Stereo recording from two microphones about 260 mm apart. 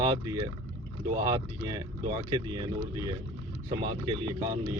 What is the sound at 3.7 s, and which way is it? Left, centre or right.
Speech, centre.